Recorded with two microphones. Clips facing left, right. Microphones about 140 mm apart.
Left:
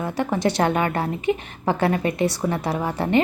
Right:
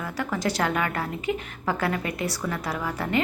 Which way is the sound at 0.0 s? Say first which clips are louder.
Left 6 dB; 25° left (ahead or behind).